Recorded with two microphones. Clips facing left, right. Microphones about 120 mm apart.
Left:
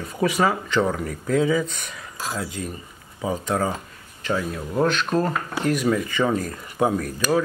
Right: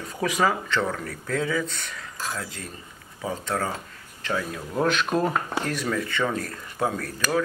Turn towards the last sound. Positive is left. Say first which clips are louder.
# left 4 dB
turn(degrees=10)  # may be behind; listen again after turning